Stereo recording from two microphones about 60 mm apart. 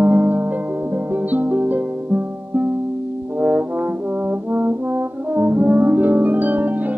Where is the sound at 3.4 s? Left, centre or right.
Right.